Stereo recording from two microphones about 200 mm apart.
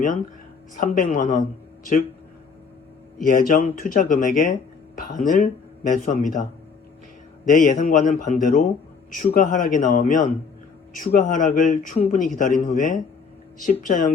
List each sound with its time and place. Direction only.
0.8 s a man's voice: 40° left (ahead or behind)
3.2 s a man's voice: 45° left (ahead or behind)
7.4 s a man's voice: 40° left (ahead or behind)